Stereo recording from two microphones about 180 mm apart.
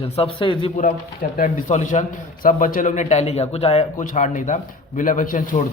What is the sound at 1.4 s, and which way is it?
A man's voice, 45° left (ahead or behind).